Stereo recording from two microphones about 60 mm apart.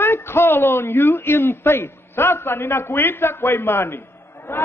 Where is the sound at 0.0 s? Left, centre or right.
Left.